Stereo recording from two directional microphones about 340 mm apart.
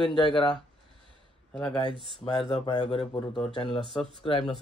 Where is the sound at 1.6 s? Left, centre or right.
Centre.